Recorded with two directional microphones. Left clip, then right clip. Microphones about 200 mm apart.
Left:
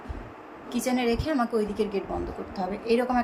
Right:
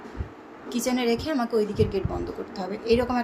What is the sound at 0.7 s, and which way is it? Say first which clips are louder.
A woman's voice: right 1 dB; 10° right (ahead or behind).